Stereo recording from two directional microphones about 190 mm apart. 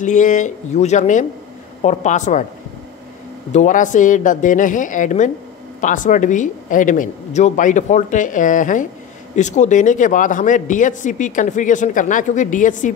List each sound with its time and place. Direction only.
0.0 s speech: 40° left (ahead or behind)
3.5 s speech: 40° left (ahead or behind)